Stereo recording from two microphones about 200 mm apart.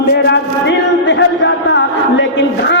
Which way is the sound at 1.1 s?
65° left (ahead or behind).